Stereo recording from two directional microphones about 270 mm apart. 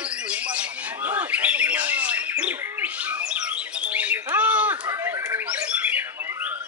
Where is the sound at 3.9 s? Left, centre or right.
Centre.